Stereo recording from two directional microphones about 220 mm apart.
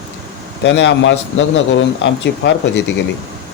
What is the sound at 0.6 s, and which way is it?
A man's voice, 50° left (ahead or behind).